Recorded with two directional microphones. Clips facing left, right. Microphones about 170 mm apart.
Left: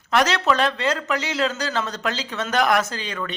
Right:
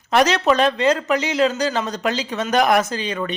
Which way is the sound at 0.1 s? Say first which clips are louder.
Right 3 dB; 20° right (ahead or behind).